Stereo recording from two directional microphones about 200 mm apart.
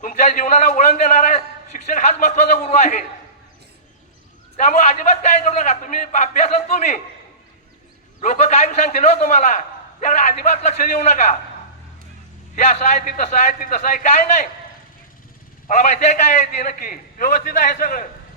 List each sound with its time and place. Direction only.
0.0 s a man's voice: 40° left (ahead or behind)
4.5 s a man's voice: 35° left (ahead or behind)
8.2 s a man's voice: 35° left (ahead or behind)
12.5 s a man's voice: 35° left (ahead or behind)
15.6 s a man's voice: 35° left (ahead or behind)